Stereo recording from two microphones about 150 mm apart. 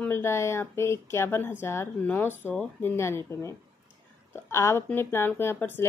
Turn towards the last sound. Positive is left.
turn(degrees=15)  # may be behind; listen again after turning